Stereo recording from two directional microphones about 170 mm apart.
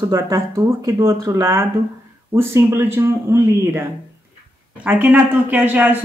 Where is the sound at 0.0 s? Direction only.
20° right (ahead or behind).